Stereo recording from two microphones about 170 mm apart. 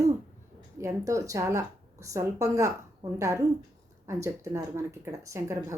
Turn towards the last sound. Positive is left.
turn(degrees=-15)  # may be behind; listen again after turning